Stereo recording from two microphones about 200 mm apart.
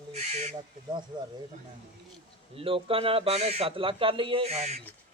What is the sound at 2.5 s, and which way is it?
Speech, 25° right (ahead or behind).